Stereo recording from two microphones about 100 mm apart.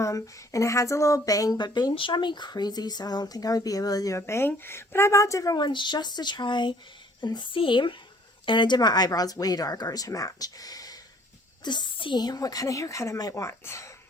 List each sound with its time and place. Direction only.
0.0 s speech: 30° left (ahead or behind)